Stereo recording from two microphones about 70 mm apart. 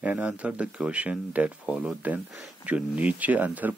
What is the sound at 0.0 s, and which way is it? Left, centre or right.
Speech, centre.